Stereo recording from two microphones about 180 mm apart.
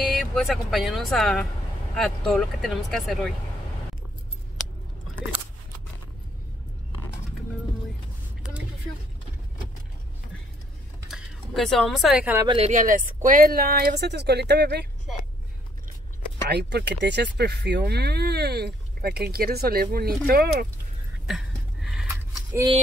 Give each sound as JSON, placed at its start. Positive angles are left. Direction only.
{"t": 0.1, "sound": "speech", "side_deg": 0}
{"t": 11.1, "sound": "speech", "side_deg": 0}
{"t": 12.4, "sound": "speech", "side_deg": -35}
{"t": 12.7, "sound": "speech", "side_deg": -50}
{"t": 16.4, "sound": "speech", "side_deg": -70}
{"t": 21.3, "sound": "a sound", "side_deg": -5}